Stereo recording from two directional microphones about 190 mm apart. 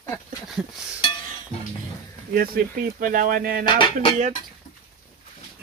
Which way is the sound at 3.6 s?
25° left (ahead or behind).